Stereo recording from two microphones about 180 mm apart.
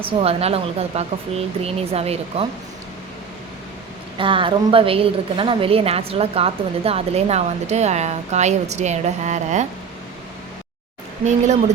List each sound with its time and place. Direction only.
0.0 s a woman's voice: 35° right (ahead or behind)
4.2 s a woman's voice: 30° right (ahead or behind)